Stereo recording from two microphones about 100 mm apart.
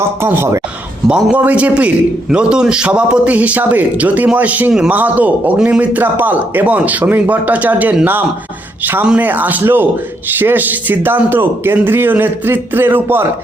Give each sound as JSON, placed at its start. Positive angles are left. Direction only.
{"t": 0.2, "sound": "speech", "side_deg": -25}
{"t": 1.0, "sound": "a man's voice", "side_deg": -10}